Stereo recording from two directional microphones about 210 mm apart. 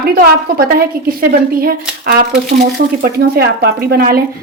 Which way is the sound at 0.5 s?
45° right (ahead or behind).